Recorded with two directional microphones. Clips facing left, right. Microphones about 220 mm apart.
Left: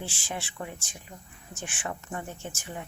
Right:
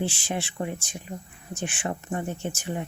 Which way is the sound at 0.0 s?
15° right (ahead or behind).